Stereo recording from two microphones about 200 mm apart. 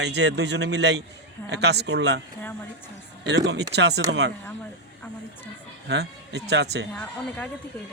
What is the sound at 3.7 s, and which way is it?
Speech, 60° right (ahead or behind).